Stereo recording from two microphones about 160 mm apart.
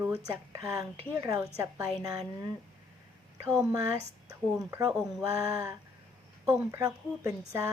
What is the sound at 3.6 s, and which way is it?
A woman's voice, 20° right (ahead or behind).